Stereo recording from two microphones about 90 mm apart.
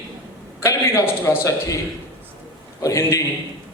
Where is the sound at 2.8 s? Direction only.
35° left (ahead or behind).